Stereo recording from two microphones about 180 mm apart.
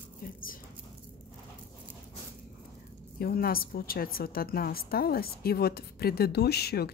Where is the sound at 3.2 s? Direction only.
55° left (ahead or behind).